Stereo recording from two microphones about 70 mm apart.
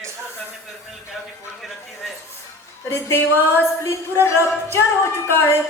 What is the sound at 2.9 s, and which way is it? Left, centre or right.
Speech, left.